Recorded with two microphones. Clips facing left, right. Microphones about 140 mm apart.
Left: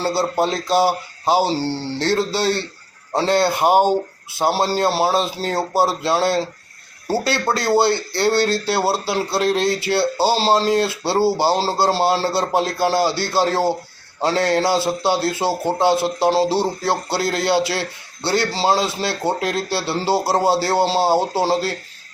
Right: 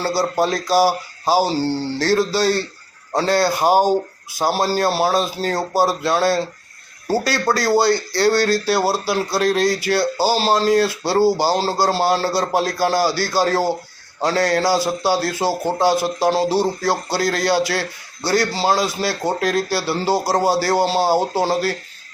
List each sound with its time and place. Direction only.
0.0 s a man's voice: 25° left (ahead or behind)